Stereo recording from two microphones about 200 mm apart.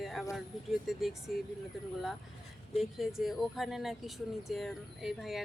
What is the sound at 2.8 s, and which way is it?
Speech, centre (ahead or behind).